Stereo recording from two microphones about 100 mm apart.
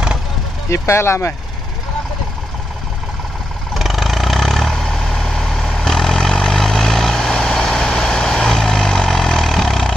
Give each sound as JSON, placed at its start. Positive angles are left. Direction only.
{"t": 0.7, "sound": "speech", "side_deg": 30}
{"t": 3.7, "sound": "vehicle", "side_deg": 0}